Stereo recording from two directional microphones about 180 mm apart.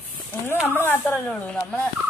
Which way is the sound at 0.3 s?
10° left (ahead or behind).